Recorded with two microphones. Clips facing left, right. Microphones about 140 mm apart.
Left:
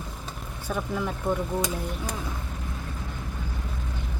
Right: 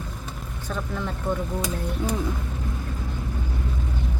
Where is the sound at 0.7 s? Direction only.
10° left (ahead or behind).